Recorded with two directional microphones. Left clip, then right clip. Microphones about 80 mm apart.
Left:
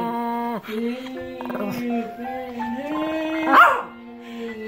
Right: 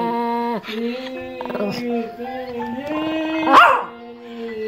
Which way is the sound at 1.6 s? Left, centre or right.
Centre.